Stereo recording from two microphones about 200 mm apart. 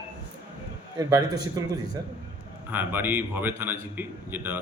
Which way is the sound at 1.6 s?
20° right (ahead or behind).